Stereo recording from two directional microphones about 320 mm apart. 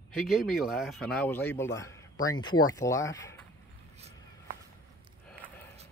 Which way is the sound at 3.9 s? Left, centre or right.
Centre.